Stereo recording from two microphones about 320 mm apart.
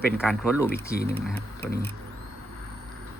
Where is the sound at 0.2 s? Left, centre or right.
Centre.